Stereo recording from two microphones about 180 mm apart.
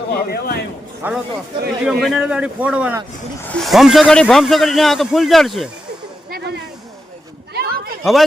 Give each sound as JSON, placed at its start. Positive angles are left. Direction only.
{"t": 0.1, "sound": "speech", "side_deg": 60}
{"t": 1.0, "sound": "a man's voice", "side_deg": -10}
{"t": 3.4, "sound": "speech", "side_deg": 5}
{"t": 6.3, "sound": "a sound", "side_deg": -65}